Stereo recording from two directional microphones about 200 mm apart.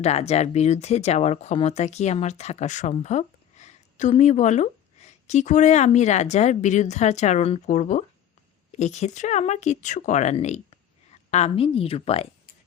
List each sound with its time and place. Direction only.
0.0 s a woman's voice: 30° left (ahead or behind)